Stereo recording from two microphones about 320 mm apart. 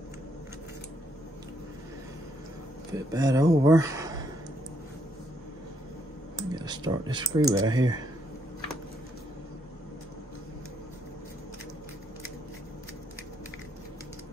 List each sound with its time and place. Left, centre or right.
2.9 s speech: centre
6.5 s speech: centre